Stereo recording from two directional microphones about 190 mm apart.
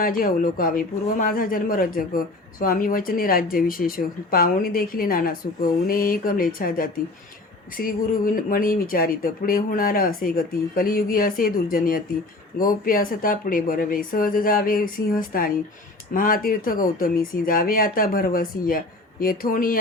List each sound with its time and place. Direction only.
0.0 s speech: 50° left (ahead or behind)